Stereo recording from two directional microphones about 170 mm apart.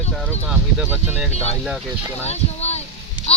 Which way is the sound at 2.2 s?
40° left (ahead or behind).